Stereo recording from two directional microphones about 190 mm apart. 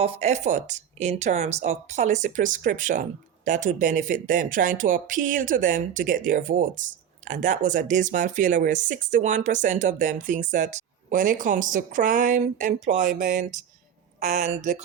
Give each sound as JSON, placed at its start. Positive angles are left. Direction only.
{"t": 0.0, "sound": "speech", "side_deg": -35}